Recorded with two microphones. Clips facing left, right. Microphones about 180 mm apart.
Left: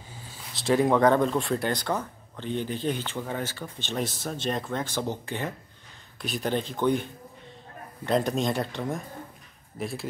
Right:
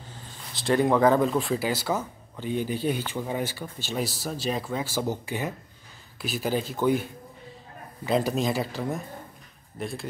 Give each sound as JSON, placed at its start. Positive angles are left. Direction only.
{"t": 0.1, "sound": "speech", "side_deg": 10}